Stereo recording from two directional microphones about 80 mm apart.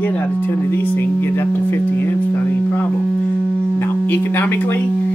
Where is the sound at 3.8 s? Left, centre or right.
Left.